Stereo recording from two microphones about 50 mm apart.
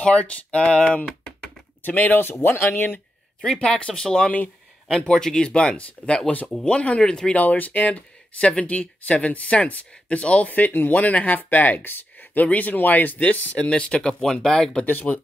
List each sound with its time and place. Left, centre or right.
0.0 s speech: left
1.8 s speech: left
2.4 s speech: left
3.6 s speech: centre; by 8.0 s left
8.4 s speech: left
13.7 s speech: left
14.9 s speech: left